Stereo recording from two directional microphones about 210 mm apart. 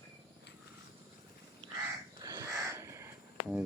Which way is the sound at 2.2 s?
15° right (ahead or behind).